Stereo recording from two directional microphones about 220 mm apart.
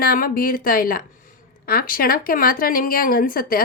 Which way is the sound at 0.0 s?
40° left (ahead or behind).